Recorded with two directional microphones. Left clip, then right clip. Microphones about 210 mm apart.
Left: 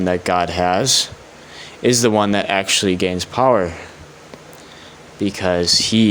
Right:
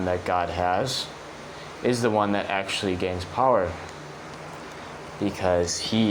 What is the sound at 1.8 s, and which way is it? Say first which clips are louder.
Speech: left 7 dB; 60° left (ahead or behind).